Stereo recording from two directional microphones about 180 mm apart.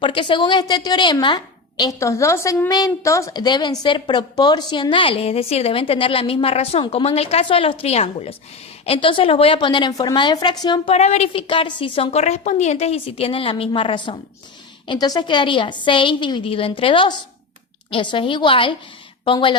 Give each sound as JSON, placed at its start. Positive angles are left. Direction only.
{"t": 0.0, "sound": "a woman's voice", "side_deg": 30}
{"t": 10.9, "sound": "a woman's voice", "side_deg": 35}